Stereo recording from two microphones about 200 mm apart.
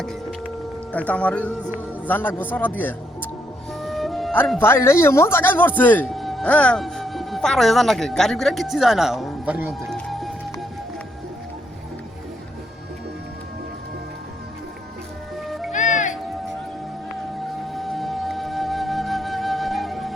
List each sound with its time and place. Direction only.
0.0 s music: centre (ahead or behind)
0.9 s a man's voice: 5° left (ahead or behind)
3.8 s music: centre (ahead or behind)
4.6 s speech: 15° left (ahead or behind); by 9.7 s 10° right (ahead or behind)
9.9 s music: centre (ahead or behind)
15.4 s music: centre (ahead or behind)
15.7 s music: 40° left (ahead or behind)
17.7 s music: centre (ahead or behind)